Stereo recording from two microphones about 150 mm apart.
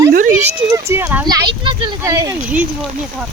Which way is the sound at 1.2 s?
30° right (ahead or behind).